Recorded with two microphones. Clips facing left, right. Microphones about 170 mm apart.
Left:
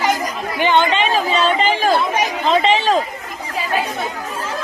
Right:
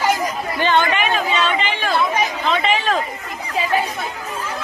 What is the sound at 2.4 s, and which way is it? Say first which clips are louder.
Chatter: left 8 dB; 35° left (ahead or behind).